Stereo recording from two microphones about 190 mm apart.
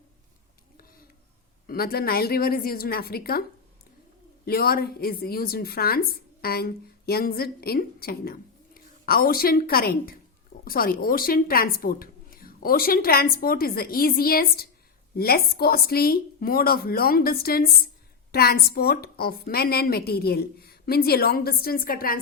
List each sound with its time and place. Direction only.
1.6 s a woman's voice: 50° left (ahead or behind)
4.4 s a woman's voice: 55° left (ahead or behind)